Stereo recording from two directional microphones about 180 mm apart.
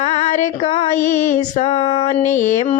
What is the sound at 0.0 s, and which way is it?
Female singing, 40° left (ahead or behind).